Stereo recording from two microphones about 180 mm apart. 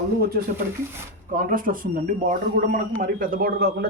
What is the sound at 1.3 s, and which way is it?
A man's voice, 50° right (ahead or behind).